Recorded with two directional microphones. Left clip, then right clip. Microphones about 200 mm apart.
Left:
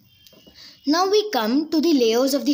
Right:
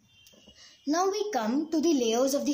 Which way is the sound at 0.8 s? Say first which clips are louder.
Left 9 dB; 45° left (ahead or behind).